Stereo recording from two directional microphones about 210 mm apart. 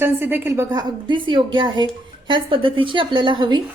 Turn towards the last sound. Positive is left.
turn(degrees=-20)  # may be behind; listen again after turning